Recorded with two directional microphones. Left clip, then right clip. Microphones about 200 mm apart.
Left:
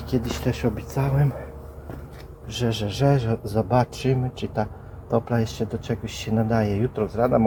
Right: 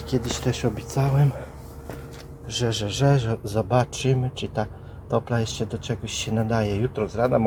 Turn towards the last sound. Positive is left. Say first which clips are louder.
# left 1 dB
turn(degrees=-10)  # may be behind; listen again after turning